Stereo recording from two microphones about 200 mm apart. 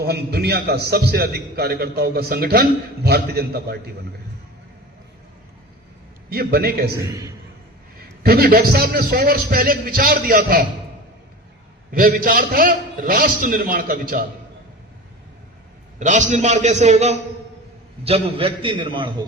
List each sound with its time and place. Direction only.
0.0 s a man's voice: 50° right (ahead or behind)
6.3 s a man's voice: 50° right (ahead or behind)
7.0 s a man's voice: 15° right (ahead or behind)
7.9 s a man's voice: 50° right (ahead or behind)
11.9 s a man's voice: 45° right (ahead or behind)
16.0 s a man's voice: 35° right (ahead or behind)